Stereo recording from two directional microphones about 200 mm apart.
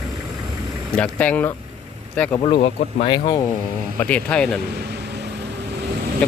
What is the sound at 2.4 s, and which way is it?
Speech, 25° left (ahead or behind).